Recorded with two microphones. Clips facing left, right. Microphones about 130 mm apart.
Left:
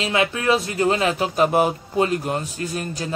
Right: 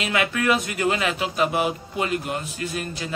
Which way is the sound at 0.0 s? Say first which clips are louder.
Left 2 dB; 30° left (ahead or behind).